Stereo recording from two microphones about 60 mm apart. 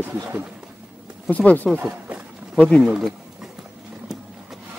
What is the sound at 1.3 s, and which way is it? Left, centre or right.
Speech, left.